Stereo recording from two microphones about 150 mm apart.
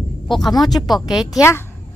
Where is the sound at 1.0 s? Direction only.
Centre (ahead or behind).